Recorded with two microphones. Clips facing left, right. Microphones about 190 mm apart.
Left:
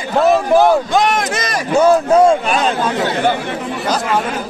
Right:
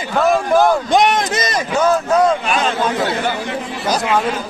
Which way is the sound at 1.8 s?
30° left (ahead or behind).